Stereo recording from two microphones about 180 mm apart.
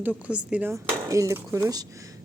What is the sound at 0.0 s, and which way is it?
Speech, 10° right (ahead or behind).